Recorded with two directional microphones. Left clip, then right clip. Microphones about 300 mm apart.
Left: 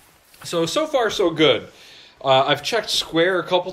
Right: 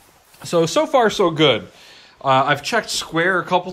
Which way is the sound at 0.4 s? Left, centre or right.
Centre.